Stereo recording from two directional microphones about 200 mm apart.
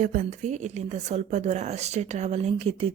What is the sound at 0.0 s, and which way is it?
Speech, 40° right (ahead or behind).